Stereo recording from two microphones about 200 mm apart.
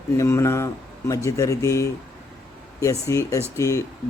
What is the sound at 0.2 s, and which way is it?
A man's voice, 15° left (ahead or behind).